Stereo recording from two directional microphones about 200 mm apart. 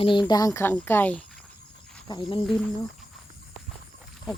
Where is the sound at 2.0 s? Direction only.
25° left (ahead or behind).